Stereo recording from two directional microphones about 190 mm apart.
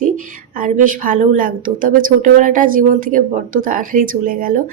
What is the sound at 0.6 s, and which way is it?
A woman's voice, 45° right (ahead or behind).